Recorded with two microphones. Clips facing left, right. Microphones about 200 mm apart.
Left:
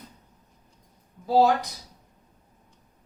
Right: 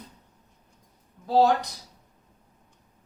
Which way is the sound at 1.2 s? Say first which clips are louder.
Left 1 dB; 5° left (ahead or behind).